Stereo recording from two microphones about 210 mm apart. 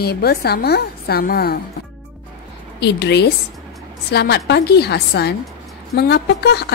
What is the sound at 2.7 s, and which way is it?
A woman's voice, 55° left (ahead or behind).